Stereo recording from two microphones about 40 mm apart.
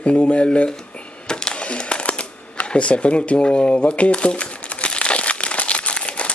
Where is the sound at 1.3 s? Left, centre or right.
Left.